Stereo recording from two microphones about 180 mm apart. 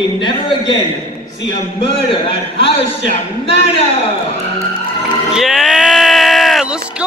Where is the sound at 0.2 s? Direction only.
25° left (ahead or behind).